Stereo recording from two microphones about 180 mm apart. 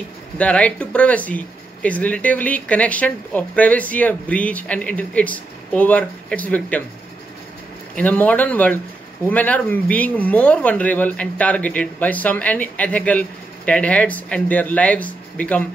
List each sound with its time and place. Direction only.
0.4 s speech: 5° left (ahead or behind)
7.9 s speech: 10° left (ahead or behind)